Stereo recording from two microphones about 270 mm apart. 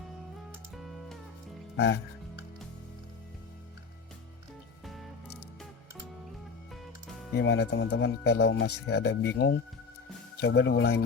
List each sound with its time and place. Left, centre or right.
0.8 s music: centre
1.7 s speech: left
7.3 s speech: left